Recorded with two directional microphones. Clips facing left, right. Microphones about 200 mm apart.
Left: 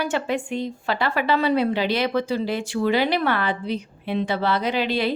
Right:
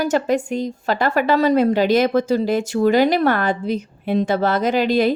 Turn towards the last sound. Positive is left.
turn(degrees=-45)  # may be behind; listen again after turning